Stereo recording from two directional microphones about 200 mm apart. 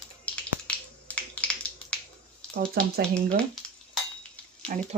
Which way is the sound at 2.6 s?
50° right (ahead or behind).